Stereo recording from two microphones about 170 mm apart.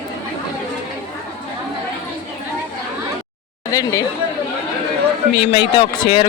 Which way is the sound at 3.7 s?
20° left (ahead or behind).